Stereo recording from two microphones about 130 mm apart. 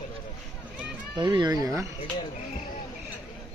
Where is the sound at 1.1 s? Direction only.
35° right (ahead or behind).